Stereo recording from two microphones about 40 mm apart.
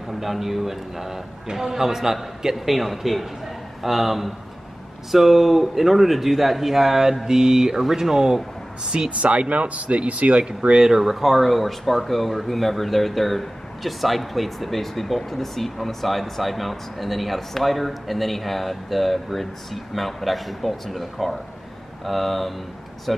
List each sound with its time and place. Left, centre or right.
0.1 s speech: centre; by 9.1 s right
9.2 s speech: right
10.4 s speech: right
10.9 s speech: centre